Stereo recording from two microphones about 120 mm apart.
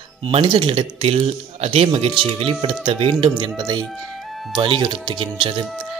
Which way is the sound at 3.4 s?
35° right (ahead or behind).